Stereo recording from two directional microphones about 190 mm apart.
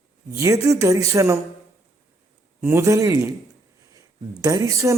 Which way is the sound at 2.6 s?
15° right (ahead or behind).